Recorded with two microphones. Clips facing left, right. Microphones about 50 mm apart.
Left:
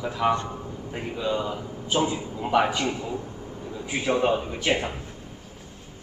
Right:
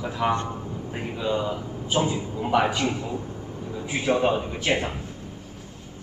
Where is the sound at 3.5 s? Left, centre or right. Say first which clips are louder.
Right 1 dB; centre.